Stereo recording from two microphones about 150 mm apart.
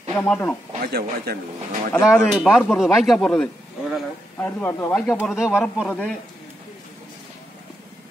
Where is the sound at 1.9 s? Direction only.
15° left (ahead or behind).